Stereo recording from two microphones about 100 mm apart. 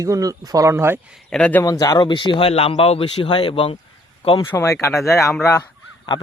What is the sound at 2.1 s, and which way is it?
A man's voice, 55° left (ahead or behind).